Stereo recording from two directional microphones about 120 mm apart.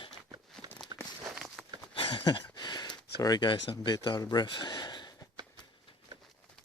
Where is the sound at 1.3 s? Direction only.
5° right (ahead or behind).